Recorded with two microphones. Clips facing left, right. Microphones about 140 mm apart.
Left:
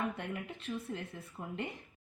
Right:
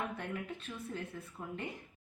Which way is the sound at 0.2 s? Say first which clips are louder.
Even; 25° left (ahead or behind).